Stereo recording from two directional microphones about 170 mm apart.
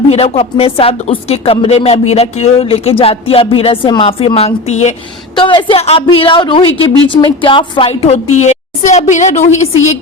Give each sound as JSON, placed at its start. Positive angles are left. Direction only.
{"t": 0.1, "sound": "speech", "side_deg": 35}
{"t": 5.3, "sound": "speech", "side_deg": 30}